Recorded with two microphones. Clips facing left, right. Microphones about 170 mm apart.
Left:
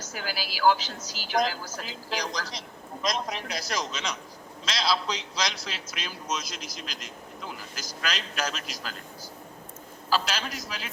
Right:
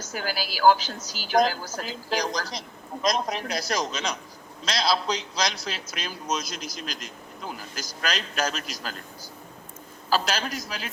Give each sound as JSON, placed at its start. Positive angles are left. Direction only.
{"t": 0.1, "sound": "a man's voice", "side_deg": -45}
{"t": 10.1, "sound": "a man's voice", "side_deg": -40}